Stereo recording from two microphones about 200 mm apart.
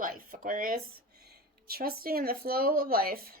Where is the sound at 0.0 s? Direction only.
45° right (ahead or behind).